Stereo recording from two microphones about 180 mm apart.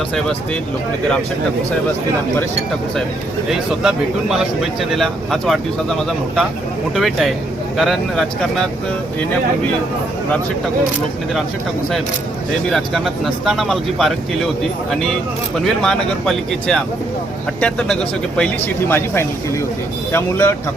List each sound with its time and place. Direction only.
3.5 s speech: 5° right (ahead or behind)
12.6 s speech: centre (ahead or behind)